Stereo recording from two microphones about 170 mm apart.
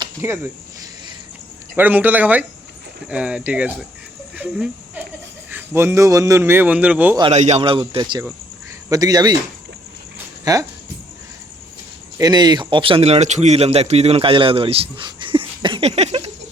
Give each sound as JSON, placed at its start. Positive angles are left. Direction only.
{"t": 0.2, "sound": "a man's voice", "side_deg": -15}
{"t": 1.7, "sound": "a man's voice", "side_deg": -10}
{"t": 4.4, "sound": "a sound", "side_deg": -5}
{"t": 5.5, "sound": "a man's voice", "side_deg": -15}
{"t": 7.2, "sound": "a man's voice", "side_deg": -40}
{"t": 10.4, "sound": "speech", "side_deg": -20}
{"t": 12.1, "sound": "speech", "side_deg": -25}